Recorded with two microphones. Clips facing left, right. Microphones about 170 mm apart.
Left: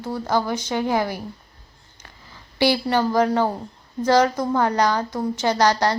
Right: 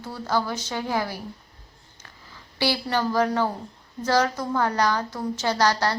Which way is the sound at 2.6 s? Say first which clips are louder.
Left 5 dB; 15° left (ahead or behind).